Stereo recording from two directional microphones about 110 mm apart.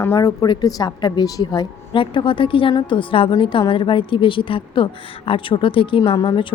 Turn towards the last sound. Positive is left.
turn(degrees=45)  # may be behind; listen again after turning